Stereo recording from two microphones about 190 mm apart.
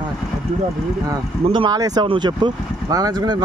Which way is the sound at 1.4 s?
25° right (ahead or behind).